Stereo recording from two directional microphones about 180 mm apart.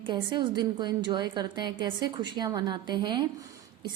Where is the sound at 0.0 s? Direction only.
25° right (ahead or behind).